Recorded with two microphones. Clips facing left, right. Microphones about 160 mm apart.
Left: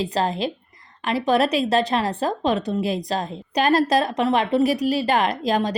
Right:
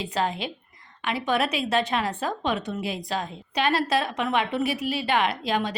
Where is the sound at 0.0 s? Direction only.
35° left (ahead or behind).